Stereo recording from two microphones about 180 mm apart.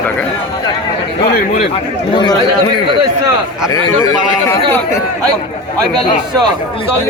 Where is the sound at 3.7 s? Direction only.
20° left (ahead or behind).